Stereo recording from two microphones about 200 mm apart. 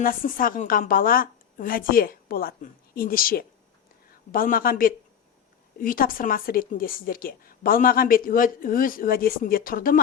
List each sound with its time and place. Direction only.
0.0 s a woman's voice: 45° left (ahead or behind)